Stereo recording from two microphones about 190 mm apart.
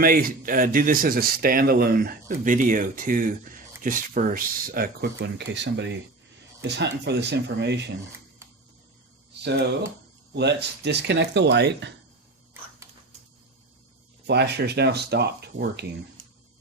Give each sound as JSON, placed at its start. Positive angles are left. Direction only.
{"t": 0.0, "sound": "speech", "side_deg": -50}
{"t": 9.3, "sound": "a sound", "side_deg": -65}
{"t": 10.3, "sound": "speech", "side_deg": -65}
{"t": 14.3, "sound": "speech", "side_deg": -60}